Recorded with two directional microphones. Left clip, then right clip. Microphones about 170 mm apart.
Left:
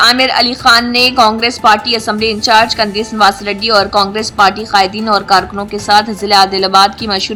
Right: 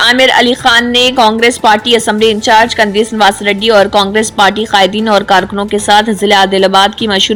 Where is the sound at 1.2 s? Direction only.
15° right (ahead or behind).